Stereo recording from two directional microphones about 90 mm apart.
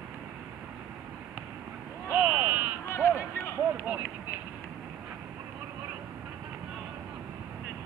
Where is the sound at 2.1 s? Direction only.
15° right (ahead or behind).